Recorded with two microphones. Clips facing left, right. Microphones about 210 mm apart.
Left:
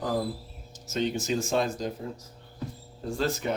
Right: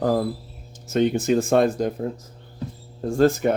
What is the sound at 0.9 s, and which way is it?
Speech, 60° right (ahead or behind).